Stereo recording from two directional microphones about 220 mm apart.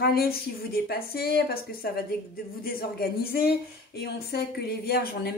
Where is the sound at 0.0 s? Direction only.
45° left (ahead or behind).